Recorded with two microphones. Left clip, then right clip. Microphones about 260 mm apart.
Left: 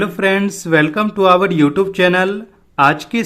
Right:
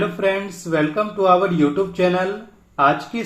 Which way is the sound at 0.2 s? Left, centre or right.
Left.